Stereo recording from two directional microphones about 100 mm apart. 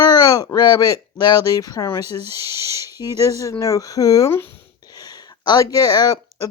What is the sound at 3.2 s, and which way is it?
Speech, 35° left (ahead or behind).